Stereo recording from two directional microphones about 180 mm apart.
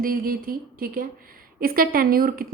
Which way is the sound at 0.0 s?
50° right (ahead or behind).